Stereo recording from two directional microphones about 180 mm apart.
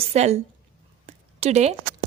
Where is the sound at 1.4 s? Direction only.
40° right (ahead or behind).